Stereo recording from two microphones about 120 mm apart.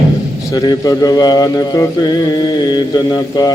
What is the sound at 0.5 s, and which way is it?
Speech, 30° left (ahead or behind).